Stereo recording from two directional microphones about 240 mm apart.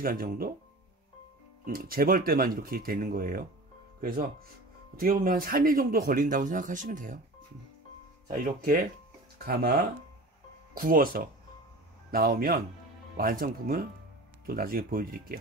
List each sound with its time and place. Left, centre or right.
0.0 s a man's voice: right
1.7 s a man's voice: right
8.3 s a man's voice: right